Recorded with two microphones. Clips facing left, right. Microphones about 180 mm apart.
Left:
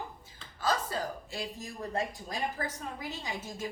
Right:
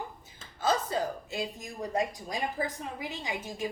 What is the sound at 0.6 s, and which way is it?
A woman's voice, 20° right (ahead or behind).